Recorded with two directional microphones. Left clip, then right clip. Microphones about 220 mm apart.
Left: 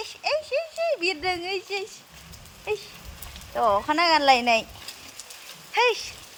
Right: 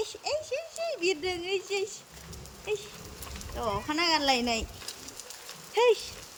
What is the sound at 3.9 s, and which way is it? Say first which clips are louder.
Speech: left 5 dB; 15° left (ahead or behind).